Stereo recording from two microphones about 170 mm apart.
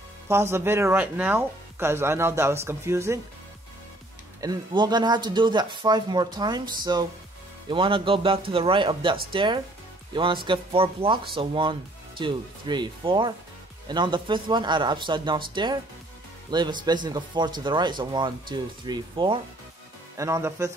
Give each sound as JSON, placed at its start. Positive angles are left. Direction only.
{"t": 0.3, "sound": "speech", "side_deg": -15}
{"t": 4.4, "sound": "speech", "side_deg": -25}